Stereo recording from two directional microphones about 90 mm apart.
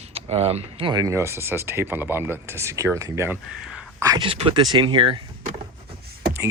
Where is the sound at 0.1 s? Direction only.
90° right.